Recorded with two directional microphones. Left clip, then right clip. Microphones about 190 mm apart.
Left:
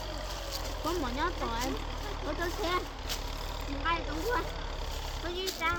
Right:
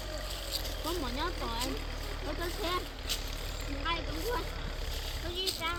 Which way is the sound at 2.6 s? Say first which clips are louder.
Left 2 dB; centre (ahead or behind).